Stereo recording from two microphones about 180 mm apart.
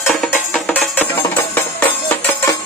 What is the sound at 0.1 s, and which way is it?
Music, 5° left (ahead or behind).